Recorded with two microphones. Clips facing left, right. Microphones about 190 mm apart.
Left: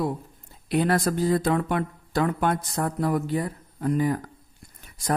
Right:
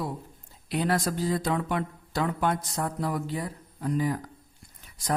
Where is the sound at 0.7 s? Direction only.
55° left (ahead or behind).